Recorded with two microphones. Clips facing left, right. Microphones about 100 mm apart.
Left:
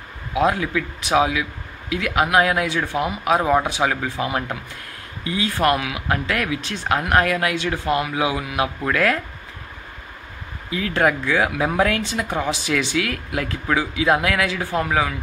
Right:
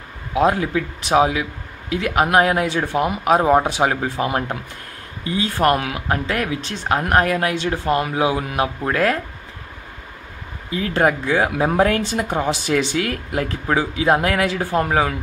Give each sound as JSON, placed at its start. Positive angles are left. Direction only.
{"t": 0.4, "sound": "speech", "side_deg": -40}
{"t": 10.7, "sound": "speech", "side_deg": -35}